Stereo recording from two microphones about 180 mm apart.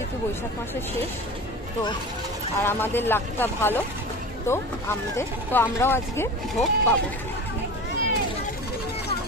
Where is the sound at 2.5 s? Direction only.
10° left (ahead or behind).